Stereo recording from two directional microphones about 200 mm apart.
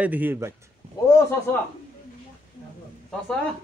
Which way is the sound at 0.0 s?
10° right (ahead or behind).